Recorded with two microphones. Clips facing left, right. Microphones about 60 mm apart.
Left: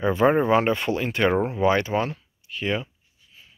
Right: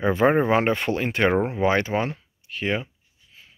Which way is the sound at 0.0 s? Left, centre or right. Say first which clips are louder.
Even; right.